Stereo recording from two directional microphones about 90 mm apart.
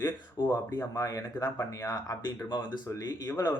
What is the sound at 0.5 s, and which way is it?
Speech, 50° left (ahead or behind).